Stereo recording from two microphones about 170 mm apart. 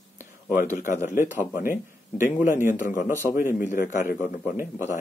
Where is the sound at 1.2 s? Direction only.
15° right (ahead or behind).